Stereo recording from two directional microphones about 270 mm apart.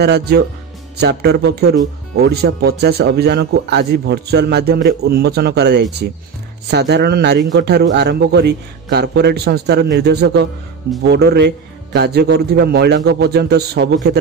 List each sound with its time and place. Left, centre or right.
0.0 s speech: right